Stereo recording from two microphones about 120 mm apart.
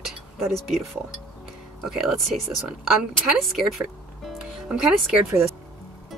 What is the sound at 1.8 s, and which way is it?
Speech, centre (ahead or behind).